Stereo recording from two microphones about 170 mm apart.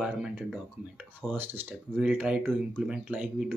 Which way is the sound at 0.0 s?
5° right (ahead or behind).